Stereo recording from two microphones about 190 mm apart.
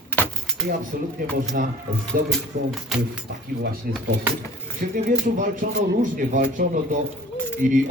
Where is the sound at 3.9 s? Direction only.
50° right (ahead or behind).